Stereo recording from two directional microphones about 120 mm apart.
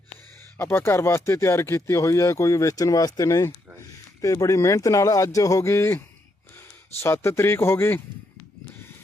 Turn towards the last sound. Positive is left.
turn(degrees=20)  # may be behind; listen again after turning